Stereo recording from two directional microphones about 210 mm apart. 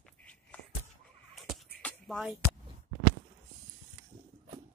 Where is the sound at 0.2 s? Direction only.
5° left (ahead or behind).